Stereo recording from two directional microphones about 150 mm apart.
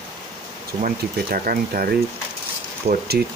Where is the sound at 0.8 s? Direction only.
70° right (ahead or behind).